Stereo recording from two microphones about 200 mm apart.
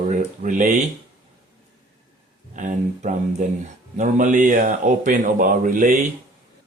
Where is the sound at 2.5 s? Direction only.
40° right (ahead or behind).